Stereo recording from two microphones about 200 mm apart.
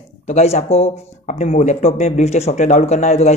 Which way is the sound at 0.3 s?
35° left (ahead or behind).